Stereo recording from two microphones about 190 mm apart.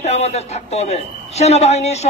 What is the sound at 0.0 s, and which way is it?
Speech, 35° left (ahead or behind).